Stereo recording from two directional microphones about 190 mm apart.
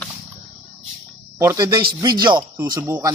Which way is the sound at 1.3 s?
15° right (ahead or behind).